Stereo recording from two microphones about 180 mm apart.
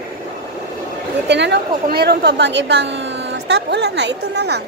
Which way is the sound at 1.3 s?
75° right (ahead or behind).